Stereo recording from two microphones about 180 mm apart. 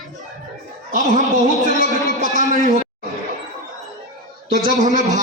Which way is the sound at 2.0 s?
45° right (ahead or behind).